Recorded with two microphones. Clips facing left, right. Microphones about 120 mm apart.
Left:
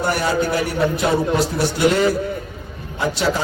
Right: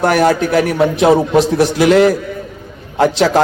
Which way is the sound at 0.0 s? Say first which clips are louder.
Right 7 dB; 90° right.